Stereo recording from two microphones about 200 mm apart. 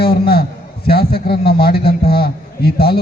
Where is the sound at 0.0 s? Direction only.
50° left (ahead or behind).